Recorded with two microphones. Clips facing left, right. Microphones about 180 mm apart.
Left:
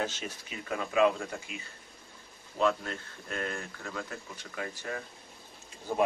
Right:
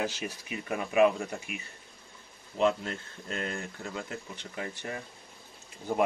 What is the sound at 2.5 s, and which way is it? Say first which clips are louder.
Speech: right 2 dB; 20° right (ahead or behind).